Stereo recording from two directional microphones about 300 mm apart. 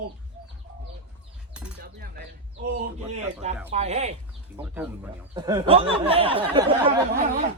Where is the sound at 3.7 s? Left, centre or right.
Right.